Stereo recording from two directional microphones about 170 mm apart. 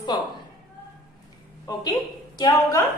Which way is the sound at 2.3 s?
20° left (ahead or behind).